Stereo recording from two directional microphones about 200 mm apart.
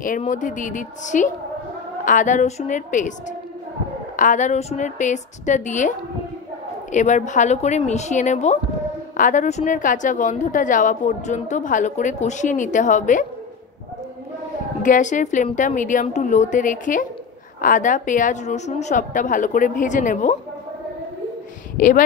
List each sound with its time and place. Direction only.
0.2 s a woman's voice: 40° left (ahead or behind)
4.2 s a woman's voice: 40° left (ahead or behind)
14.8 s a woman's voice: 40° left (ahead or behind)
21.7 s speech: 40° left (ahead or behind)